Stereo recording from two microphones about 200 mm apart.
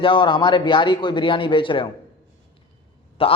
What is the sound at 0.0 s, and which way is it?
A man's voice, 25° left (ahead or behind).